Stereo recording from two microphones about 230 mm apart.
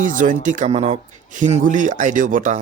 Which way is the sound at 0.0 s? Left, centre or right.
Right.